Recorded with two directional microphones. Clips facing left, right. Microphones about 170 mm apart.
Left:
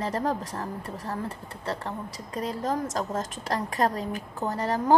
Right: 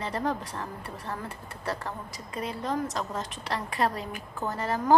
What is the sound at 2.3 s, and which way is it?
A woman's voice, 40° left (ahead or behind).